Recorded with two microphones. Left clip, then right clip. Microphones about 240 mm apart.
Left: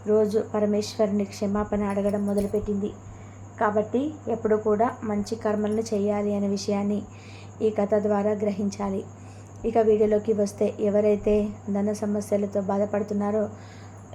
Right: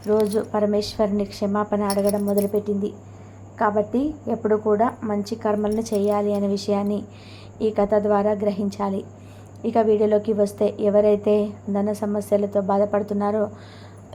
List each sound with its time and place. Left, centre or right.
0.1 s a woman's voice: centre